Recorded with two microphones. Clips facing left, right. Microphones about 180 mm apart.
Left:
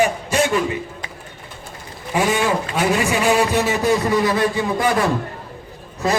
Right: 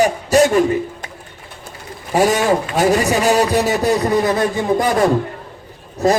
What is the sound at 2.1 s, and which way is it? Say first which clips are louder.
A man's voice: right 4 dB; 40° right (ahead or behind).